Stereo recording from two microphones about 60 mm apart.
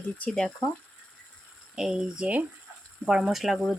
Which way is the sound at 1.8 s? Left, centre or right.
Centre.